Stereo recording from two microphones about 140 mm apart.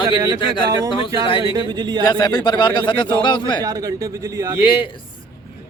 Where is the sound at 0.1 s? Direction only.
30° right (ahead or behind).